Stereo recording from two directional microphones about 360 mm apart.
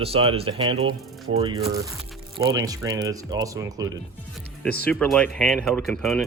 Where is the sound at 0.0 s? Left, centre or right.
Centre.